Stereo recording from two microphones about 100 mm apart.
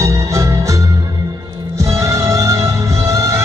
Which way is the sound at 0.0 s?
35° right (ahead or behind).